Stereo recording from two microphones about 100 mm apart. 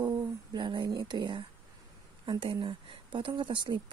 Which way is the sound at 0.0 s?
45° right (ahead or behind).